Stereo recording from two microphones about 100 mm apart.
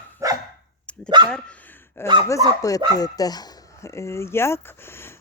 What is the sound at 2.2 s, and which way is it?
Speech, 35° left (ahead or behind).